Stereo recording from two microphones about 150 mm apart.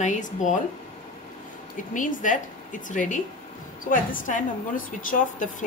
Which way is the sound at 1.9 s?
60° left (ahead or behind).